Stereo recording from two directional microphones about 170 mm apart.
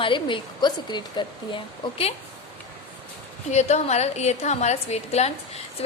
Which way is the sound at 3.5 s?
40° left (ahead or behind).